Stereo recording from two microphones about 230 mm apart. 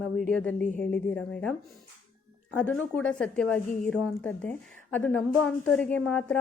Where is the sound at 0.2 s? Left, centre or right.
Centre.